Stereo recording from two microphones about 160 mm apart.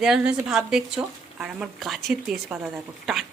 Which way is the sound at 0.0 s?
5° right (ahead or behind).